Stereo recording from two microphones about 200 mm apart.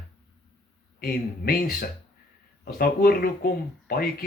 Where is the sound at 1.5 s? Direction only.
50° left (ahead or behind).